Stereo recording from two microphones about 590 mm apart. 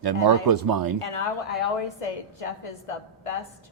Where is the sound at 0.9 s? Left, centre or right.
Left.